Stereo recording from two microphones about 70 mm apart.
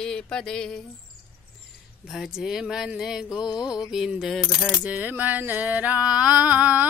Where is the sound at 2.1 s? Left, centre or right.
Centre.